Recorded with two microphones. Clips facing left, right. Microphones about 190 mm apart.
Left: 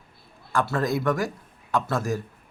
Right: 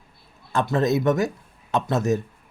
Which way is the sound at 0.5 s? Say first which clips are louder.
Right 3 dB; 20° right (ahead or behind).